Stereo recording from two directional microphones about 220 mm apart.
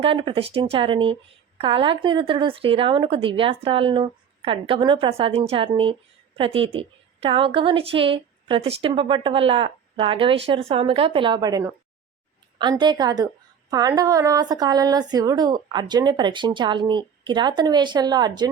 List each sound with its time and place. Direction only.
0.0 s speech: 25° right (ahead or behind)